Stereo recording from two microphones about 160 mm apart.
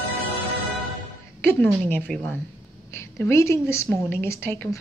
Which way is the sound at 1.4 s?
10° left (ahead or behind).